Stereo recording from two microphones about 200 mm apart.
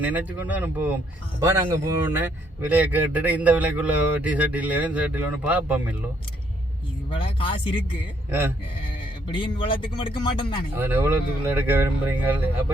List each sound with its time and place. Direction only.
0.0 s a man's voice: 10° right (ahead or behind)
7.1 s speech: 25° left (ahead or behind)
8.3 s a man's voice: 10° right (ahead or behind)
9.3 s speech: 25° left (ahead or behind)
10.8 s a man's voice: 10° right (ahead or behind)